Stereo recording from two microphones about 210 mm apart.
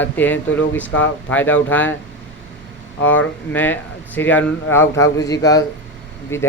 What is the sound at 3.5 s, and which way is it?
Speech, 10° left (ahead or behind).